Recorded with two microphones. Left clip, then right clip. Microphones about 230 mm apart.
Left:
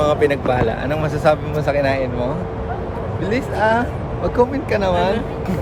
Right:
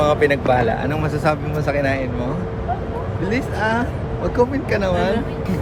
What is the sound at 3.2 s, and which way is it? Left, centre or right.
Speech, centre.